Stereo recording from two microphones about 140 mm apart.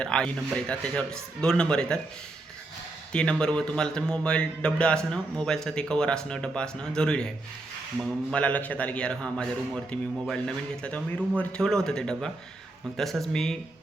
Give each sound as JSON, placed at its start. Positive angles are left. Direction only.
{"t": 0.0, "sound": "a man's voice", "side_deg": 5}
{"t": 3.1, "sound": "a man's voice", "side_deg": 5}